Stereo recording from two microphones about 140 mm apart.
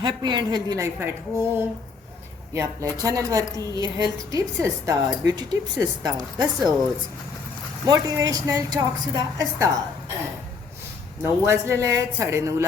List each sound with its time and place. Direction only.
0.0 s a woman's voice: 35° right (ahead or behind)
0.9 s a woman's voice: 15° right (ahead or behind)
7.9 s a woman's voice: 25° right (ahead or behind)
11.2 s a woman's voice: 20° right (ahead or behind)